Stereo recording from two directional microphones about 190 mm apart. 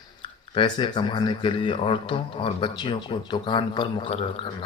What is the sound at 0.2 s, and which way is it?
Speech, 25° left (ahead or behind).